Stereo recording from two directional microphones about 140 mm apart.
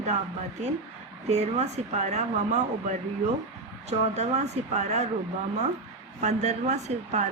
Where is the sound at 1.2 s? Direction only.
50° right (ahead or behind).